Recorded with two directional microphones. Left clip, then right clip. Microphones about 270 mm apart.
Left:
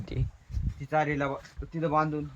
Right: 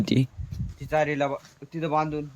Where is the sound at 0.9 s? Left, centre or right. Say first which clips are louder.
Right 4 dB; centre.